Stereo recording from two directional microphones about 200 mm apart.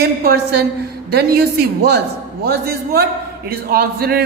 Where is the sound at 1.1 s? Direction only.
50° right (ahead or behind).